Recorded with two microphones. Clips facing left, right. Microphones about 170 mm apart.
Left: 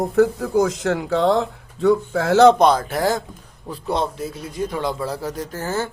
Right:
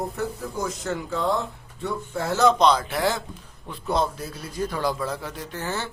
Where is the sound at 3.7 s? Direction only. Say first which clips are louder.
Left 2 dB; 30° left (ahead or behind); by 5.9 s 45° left (ahead or behind).